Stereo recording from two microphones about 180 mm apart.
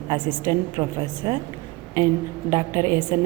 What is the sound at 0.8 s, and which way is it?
Speech, 25° right (ahead or behind).